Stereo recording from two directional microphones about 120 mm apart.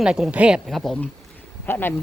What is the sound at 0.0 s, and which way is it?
Speech, 5° right (ahead or behind).